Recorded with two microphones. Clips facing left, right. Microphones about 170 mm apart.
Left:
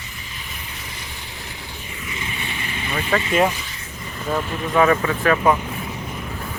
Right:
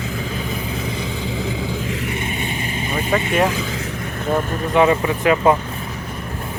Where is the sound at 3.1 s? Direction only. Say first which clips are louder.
Right 1 dB; 15° right (ahead or behind).